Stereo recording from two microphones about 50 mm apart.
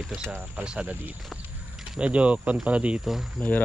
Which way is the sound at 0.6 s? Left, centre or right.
Right.